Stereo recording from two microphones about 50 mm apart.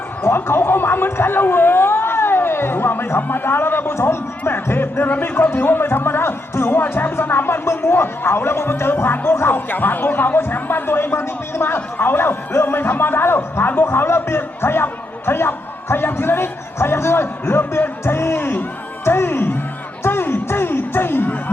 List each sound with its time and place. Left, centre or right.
0.2 s speech: left
9.6 s speech: left
20.1 s a sound: left